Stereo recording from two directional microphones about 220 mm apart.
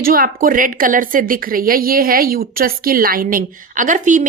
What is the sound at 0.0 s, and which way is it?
A woman's voice, 40° right (ahead or behind).